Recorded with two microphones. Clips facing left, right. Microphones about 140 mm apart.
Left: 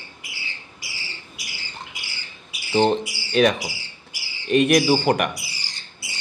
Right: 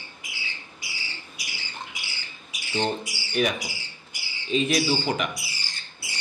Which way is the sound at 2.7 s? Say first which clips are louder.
Left 8 dB; 80° left.